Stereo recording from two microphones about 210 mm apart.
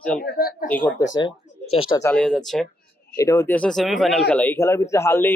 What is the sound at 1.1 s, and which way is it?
Speech, 25° left (ahead or behind).